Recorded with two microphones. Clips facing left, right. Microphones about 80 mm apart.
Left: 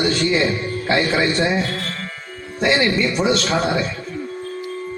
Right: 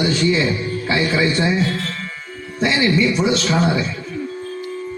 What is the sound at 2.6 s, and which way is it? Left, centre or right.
A man's voice, left.